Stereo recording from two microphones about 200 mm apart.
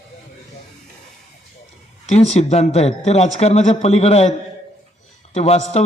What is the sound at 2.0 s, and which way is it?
A man's voice, 35° left (ahead or behind).